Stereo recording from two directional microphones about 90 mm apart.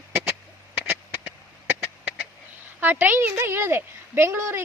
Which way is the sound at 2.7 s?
20° right (ahead or behind).